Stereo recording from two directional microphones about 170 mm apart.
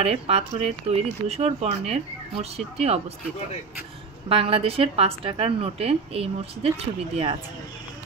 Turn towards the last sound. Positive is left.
turn(degrees=-35)  # may be behind; listen again after turning